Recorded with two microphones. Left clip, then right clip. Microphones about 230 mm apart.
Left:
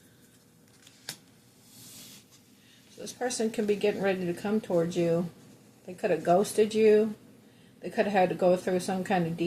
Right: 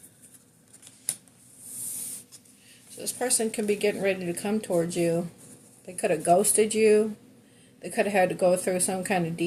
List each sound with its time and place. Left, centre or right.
3.0 s a woman's voice: right